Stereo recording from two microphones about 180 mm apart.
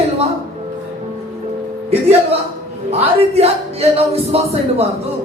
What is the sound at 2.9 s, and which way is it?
Speech, 35° right (ahead or behind).